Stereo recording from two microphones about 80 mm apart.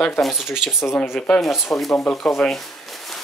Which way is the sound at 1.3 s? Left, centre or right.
Centre.